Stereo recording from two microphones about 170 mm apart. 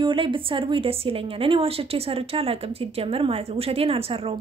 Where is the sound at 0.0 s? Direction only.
30° right (ahead or behind).